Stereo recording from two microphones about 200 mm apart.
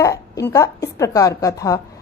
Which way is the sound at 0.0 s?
15° left (ahead or behind).